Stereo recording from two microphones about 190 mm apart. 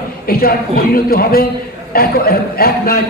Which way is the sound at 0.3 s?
50° left (ahead or behind).